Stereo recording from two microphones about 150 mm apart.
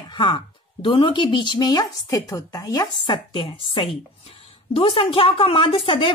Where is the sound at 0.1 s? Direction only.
35° left (ahead or behind).